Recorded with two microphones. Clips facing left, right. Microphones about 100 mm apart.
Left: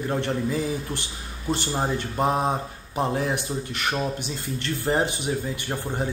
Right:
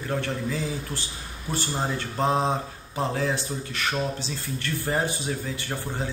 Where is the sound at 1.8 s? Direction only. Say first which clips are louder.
Left 1 dB; 15° left (ahead or behind).